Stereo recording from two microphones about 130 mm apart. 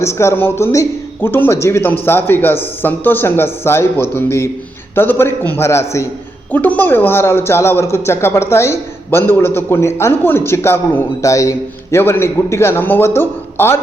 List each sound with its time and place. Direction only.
0.0 s speech: 20° left (ahead or behind)